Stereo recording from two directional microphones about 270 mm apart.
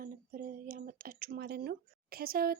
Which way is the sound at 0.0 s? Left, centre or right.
Right.